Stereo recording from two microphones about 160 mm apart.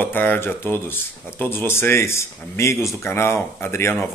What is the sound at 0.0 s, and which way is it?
Speech, 10° left (ahead or behind).